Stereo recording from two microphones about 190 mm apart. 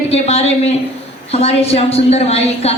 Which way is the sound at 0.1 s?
35° left (ahead or behind).